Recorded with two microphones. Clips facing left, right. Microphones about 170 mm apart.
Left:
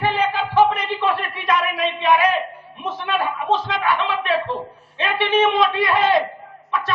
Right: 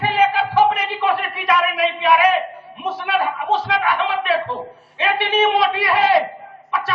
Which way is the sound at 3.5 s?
30° left (ahead or behind).